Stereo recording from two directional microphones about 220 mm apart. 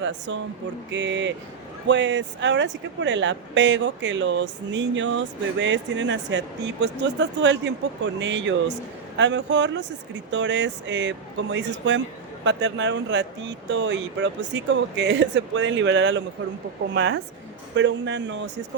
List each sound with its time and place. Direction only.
0.9 s speech: 55° right (ahead or behind)